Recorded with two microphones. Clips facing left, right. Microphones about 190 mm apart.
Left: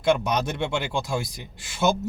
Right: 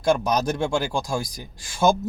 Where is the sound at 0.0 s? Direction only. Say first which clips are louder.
Right 1 dB; 40° right (ahead or behind).